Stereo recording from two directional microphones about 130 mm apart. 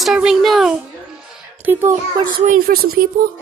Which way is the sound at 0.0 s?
5° right (ahead or behind).